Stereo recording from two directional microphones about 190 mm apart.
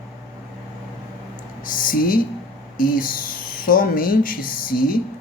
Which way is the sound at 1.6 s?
45° left (ahead or behind).